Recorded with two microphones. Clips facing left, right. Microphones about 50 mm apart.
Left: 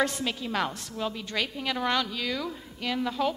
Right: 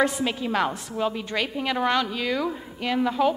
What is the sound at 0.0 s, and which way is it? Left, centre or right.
A woman's voice, centre.